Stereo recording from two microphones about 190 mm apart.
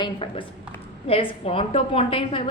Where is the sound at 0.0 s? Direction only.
25° left (ahead or behind).